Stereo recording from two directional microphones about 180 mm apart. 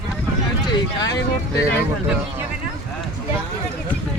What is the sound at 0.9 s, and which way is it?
Speech, 20° left (ahead or behind).